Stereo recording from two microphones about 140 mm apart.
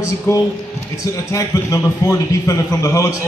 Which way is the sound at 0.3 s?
15° left (ahead or behind).